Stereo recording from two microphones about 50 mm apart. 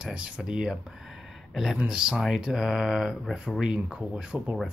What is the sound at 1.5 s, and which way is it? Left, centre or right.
Speech, centre.